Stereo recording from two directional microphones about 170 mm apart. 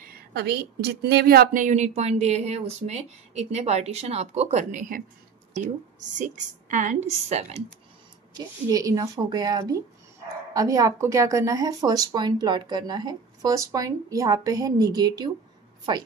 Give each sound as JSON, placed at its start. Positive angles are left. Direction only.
{"t": 0.3, "sound": "a woman's voice", "side_deg": -70}
{"t": 8.4, "sound": "speech", "side_deg": -20}